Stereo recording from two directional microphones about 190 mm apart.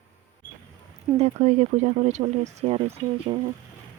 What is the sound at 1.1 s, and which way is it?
Speech, 35° right (ahead or behind).